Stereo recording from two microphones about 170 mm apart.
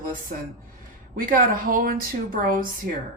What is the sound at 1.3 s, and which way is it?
Speech, 55° right (ahead or behind).